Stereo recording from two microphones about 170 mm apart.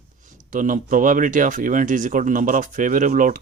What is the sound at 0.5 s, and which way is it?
Speech, 50° right (ahead or behind).